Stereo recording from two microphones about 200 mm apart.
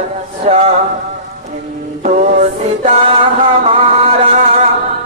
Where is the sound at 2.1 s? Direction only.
40° right (ahead or behind).